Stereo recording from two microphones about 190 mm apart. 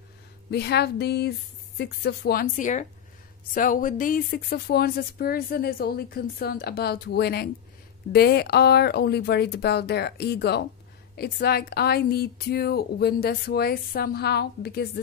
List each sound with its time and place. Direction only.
0.5 s speech: 60° left (ahead or behind)